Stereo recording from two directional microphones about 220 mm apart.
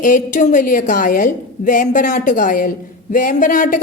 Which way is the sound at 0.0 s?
35° left (ahead or behind).